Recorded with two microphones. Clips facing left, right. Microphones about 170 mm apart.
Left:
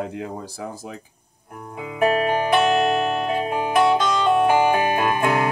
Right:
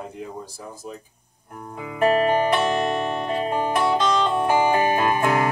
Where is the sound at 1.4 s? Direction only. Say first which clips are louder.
Left 1 dB; 10° left (ahead or behind).